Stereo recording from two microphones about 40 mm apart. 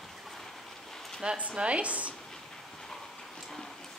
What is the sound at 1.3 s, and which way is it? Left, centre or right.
Speech, right.